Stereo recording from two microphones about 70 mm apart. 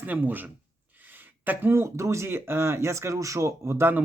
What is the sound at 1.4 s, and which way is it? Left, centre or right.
A man's voice, right.